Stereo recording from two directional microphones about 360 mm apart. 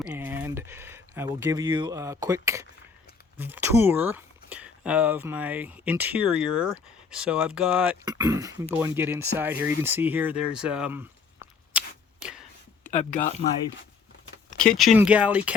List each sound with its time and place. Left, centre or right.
0.0 s a sound: centre
3.3 s speech: centre
12.8 s speech: left
14.6 s speech: centre